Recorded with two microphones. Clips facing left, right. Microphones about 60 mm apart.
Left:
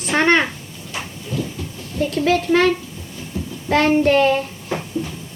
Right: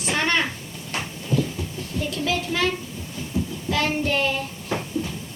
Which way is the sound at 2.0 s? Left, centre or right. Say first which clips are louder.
Left 8 dB; left.